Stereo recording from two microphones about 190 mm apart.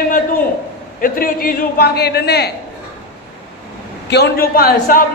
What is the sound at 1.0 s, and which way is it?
A man's voice, 50° left (ahead or behind).